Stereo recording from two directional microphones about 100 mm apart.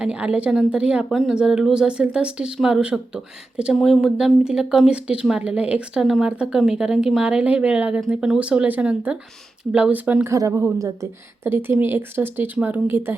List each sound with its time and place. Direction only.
0.0 s speech: 10° right (ahead or behind)
10.2 s a woman's voice: 30° right (ahead or behind)